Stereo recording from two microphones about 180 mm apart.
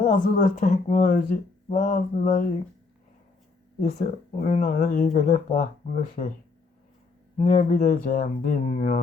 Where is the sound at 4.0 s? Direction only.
40° left (ahead or behind).